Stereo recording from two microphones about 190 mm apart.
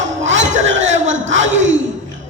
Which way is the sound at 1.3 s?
80° right.